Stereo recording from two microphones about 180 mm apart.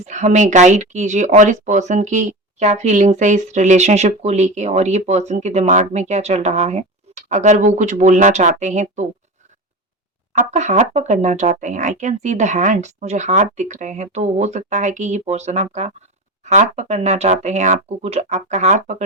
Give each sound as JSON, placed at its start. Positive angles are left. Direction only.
{"t": 0.0, "sound": "speech", "side_deg": -40}
{"t": 10.3, "sound": "speech", "side_deg": -40}